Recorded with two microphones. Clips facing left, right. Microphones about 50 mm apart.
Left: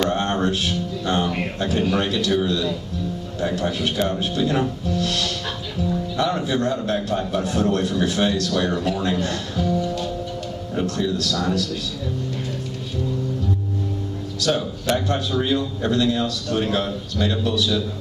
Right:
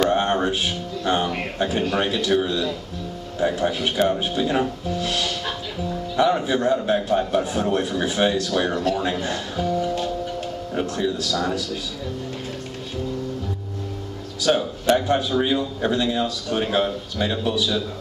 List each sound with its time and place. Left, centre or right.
0.0 s speech: centre
14.4 s speech: centre